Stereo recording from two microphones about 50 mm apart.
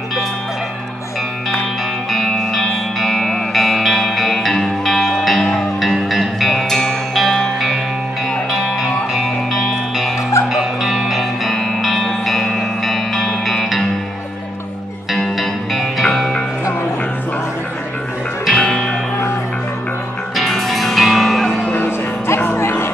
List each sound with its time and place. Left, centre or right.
2.0 s music: centre
6.7 s music: centre
8.5 s music: centre
15.1 s music: centre
18.4 s music: centre
20.3 s music: centre
22.6 s music: left